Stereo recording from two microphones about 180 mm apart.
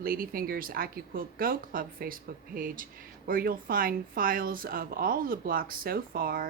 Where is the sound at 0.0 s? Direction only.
55° right (ahead or behind).